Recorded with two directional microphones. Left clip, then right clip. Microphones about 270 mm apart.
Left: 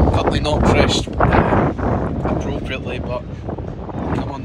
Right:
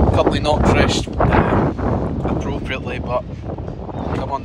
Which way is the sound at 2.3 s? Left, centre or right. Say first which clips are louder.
Even; centre.